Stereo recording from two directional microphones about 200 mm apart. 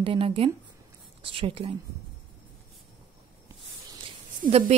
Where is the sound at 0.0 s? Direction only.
25° right (ahead or behind).